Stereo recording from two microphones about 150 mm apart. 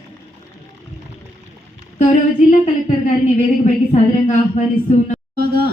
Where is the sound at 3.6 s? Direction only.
55° left (ahead or behind).